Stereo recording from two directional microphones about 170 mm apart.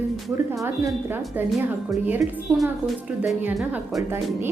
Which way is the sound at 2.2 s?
Centre (ahead or behind).